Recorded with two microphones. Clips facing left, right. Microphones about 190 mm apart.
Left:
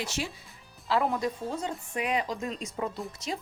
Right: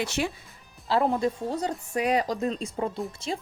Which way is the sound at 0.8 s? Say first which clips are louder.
Right 3 dB; 30° right (ahead or behind).